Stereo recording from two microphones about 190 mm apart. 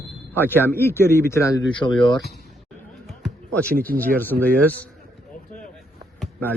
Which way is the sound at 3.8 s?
10° left (ahead or behind).